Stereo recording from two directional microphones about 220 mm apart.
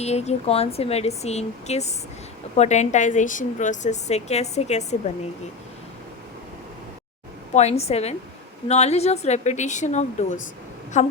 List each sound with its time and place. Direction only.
0.0 s a woman's voice: 30° left (ahead or behind)
7.5 s a woman's voice: 30° left (ahead or behind)